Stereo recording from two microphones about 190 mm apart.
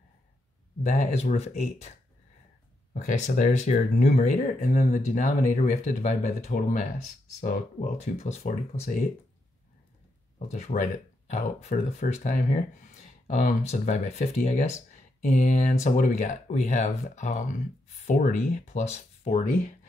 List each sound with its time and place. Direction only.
0.8 s speech: 35° left (ahead or behind)
2.9 s speech: 40° left (ahead or behind)
10.5 s speech: 40° left (ahead or behind)